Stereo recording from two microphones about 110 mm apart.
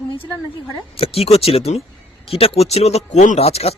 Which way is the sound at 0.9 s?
65° left (ahead or behind).